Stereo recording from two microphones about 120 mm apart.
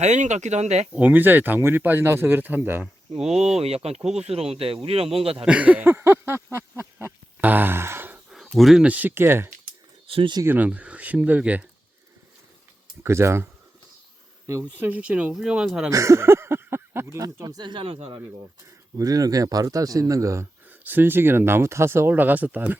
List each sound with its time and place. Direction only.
0.0 s speech: 75° right (ahead or behind)
0.9 s speech: 15° right (ahead or behind)
4.1 s speech: 60° right (ahead or behind)
5.5 s a sound: 10° right (ahead or behind)
8.3 s speech: centre (ahead or behind); by 9.5 s 20° right (ahead or behind)
10.1 s speech: 50° right (ahead or behind)
10.4 s speech: 15° right (ahead or behind)
13.0 s speech: 20° right (ahead or behind)
14.6 s speech: 15° right (ahead or behind)
15.9 s speech: 25° right (ahead or behind); by 18.2 s 50° right (ahead or behind)
18.9 s speech: 30° right (ahead or behind); by 22.8 s 15° right (ahead or behind)